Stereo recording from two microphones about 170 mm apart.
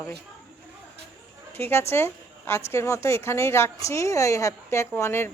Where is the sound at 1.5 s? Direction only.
15° left (ahead or behind).